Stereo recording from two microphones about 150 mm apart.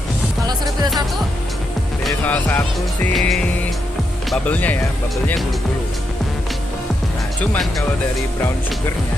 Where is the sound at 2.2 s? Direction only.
10° left (ahead or behind).